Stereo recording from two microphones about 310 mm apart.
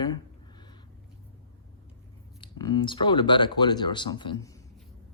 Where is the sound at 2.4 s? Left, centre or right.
Centre.